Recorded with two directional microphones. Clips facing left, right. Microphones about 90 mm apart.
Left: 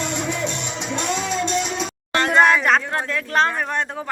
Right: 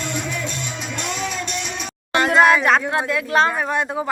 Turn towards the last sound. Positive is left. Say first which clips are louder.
# right 2 dB
turn(degrees=-5)  # may be behind; listen again after turning